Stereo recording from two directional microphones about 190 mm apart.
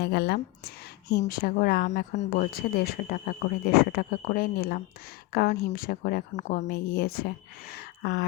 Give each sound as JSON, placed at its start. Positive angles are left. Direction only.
{"t": 0.0, "sound": "a woman's voice", "side_deg": 55}